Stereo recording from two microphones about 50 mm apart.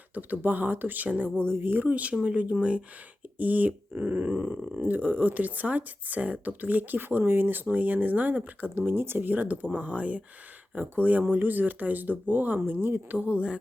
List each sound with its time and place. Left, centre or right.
0.1 s speech: right
1.4 s speech: right
8.7 s speech: right
13.1 s speech: right